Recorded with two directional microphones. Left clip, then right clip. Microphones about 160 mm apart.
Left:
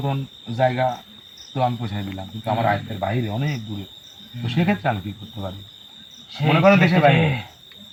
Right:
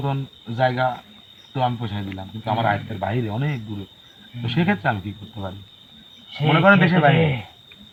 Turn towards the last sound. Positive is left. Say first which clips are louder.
# left 1 dB
turn(degrees=5)  # may be behind; listen again after turning